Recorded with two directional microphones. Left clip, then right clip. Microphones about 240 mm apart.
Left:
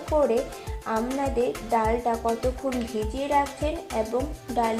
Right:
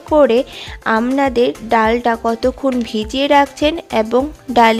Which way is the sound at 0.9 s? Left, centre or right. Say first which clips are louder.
Right 12 dB; right.